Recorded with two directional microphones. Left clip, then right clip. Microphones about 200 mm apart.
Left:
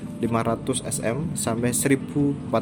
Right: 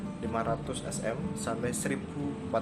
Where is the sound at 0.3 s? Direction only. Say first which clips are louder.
Left 7 dB; 45° left (ahead or behind).